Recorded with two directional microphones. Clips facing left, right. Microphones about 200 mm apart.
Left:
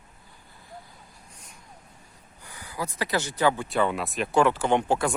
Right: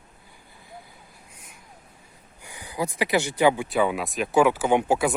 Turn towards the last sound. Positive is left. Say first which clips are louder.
# right 2 dB
turn(degrees=-10)  # may be behind; listen again after turning